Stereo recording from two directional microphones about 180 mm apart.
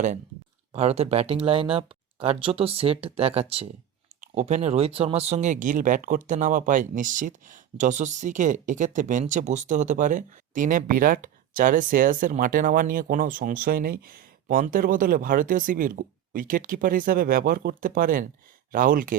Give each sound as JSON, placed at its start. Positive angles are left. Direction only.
{"t": 0.7, "sound": "speech", "side_deg": -35}